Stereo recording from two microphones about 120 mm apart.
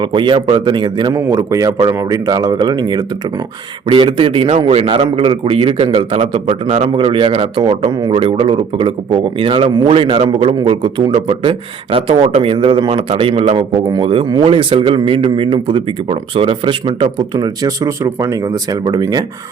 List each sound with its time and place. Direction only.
0.0 s speech: 40° right (ahead or behind)
1.1 s a man's voice: 30° right (ahead or behind)
17.8 s speech: 25° right (ahead or behind)